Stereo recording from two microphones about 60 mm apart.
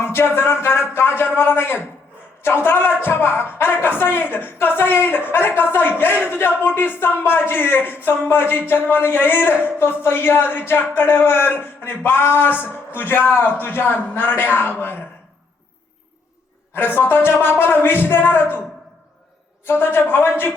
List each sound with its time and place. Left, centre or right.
0.0 s speech: left
16.7 s speech: left
19.6 s speech: left